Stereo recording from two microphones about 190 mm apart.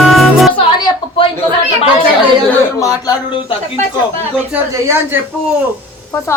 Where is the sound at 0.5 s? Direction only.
25° left (ahead or behind).